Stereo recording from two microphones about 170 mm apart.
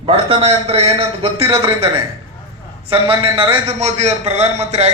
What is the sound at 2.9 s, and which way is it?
A man's voice, 30° right (ahead or behind).